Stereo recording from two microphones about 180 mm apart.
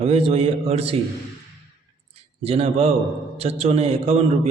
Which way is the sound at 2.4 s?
35° right (ahead or behind).